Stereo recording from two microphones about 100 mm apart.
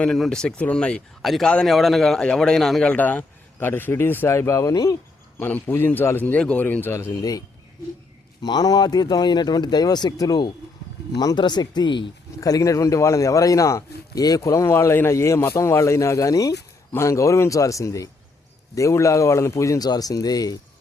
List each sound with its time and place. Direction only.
0.0 s a man's voice: 5° left (ahead or behind)
2.9 s speech: 15° left (ahead or behind); by 4.9 s 35° left (ahead or behind)
5.4 s speech: 20° left (ahead or behind)
7.2 s speech: 40° left (ahead or behind)
12.4 s speech: 35° left (ahead or behind)